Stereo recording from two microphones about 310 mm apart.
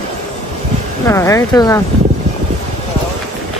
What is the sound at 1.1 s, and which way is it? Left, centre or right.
Speech, centre.